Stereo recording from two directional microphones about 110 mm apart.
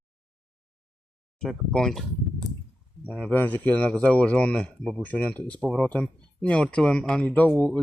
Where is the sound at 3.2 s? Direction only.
15° left (ahead or behind).